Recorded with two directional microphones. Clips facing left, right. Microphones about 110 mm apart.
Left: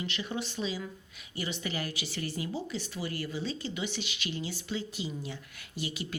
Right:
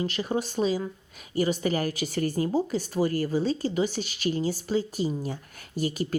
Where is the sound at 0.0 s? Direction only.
40° right (ahead or behind).